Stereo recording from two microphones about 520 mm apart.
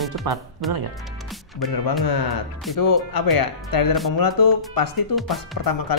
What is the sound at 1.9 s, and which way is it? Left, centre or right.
Speech, left.